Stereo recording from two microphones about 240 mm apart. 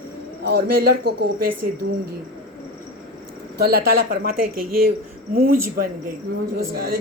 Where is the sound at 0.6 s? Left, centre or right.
Right.